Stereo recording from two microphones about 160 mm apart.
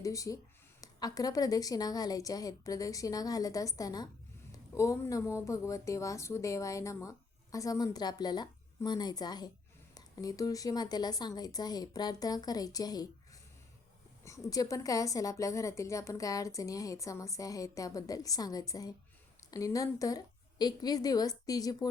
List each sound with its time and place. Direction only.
0.0 s speech: 20° left (ahead or behind)